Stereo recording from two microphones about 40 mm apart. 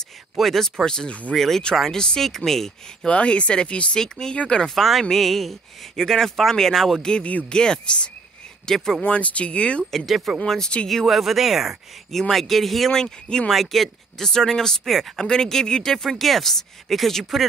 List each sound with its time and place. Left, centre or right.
0.4 s speech: centre
3.1 s speech: left
4.0 s speech: centre
4.6 s speech: centre
7.0 s speech: left
8.6 s speech: centre
9.0 s speech: left
10.0 s speech: centre
10.4 s speech: centre
11.1 s speech: centre
12.1 s speech: centre
12.9 s speech: centre
13.5 s speech: centre
16.2 s speech: centre